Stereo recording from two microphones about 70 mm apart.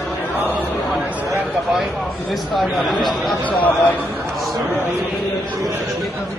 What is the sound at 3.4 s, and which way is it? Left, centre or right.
Speech, centre.